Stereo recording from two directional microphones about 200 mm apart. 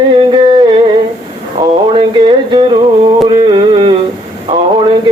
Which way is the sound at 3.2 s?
25° right (ahead or behind).